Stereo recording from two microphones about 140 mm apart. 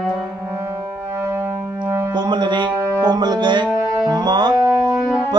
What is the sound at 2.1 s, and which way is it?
Speech, 30° right (ahead or behind).